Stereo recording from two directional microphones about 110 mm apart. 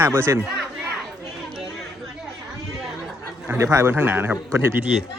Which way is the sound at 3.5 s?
25° right (ahead or behind).